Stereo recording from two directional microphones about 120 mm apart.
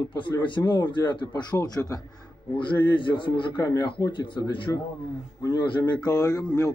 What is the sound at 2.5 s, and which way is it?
A man's voice, 40° left (ahead or behind).